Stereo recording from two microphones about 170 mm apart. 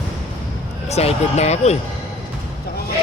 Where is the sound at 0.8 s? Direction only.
40° left (ahead or behind).